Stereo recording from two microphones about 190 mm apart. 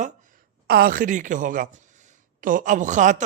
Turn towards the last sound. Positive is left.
turn(degrees=-40)  # may be behind; listen again after turning